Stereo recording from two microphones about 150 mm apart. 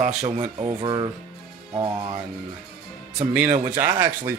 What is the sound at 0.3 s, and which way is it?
Music, 25° right (ahead or behind).